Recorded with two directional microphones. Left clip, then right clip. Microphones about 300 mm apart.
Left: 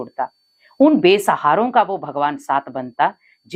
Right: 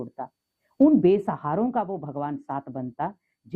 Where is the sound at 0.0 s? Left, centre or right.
Centre.